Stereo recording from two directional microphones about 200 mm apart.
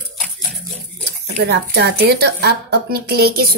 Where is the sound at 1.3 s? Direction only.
55° right (ahead or behind).